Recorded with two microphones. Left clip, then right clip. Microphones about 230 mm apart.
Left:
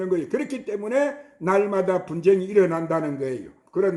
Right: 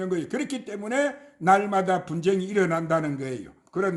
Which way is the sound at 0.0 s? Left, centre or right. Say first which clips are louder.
Left 4 dB; right.